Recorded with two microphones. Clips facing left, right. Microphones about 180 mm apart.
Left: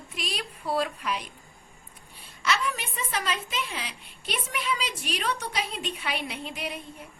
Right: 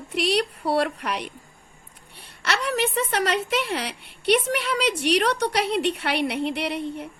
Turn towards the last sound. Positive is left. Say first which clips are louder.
# right 9 dB
turn(degrees=-70)  # may be behind; listen again after turning